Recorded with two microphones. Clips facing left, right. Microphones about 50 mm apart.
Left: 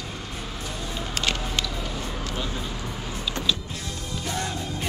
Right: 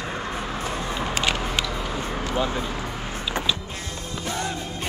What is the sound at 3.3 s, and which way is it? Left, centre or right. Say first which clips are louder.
Power windows: right 1 dB; centre.